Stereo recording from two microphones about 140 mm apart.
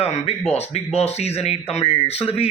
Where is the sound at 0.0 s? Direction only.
45° left (ahead or behind).